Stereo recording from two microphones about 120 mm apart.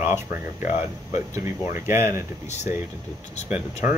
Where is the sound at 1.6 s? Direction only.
90° left.